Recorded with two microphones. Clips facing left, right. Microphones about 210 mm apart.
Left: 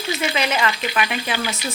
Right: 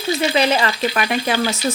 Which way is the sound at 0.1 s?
35° right (ahead or behind).